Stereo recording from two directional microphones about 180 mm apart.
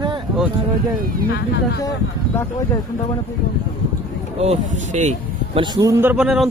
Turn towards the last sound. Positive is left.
turn(degrees=-5)  # may be behind; listen again after turning